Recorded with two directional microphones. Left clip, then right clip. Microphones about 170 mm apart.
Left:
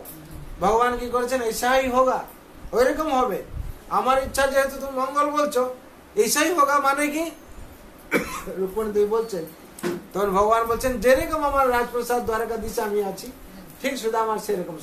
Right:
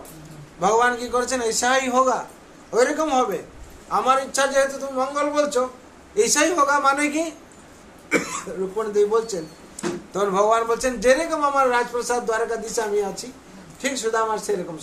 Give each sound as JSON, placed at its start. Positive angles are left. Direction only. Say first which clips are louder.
{"t": 0.6, "sound": "a man's voice", "louder": "right 1 dB", "side_deg": -15}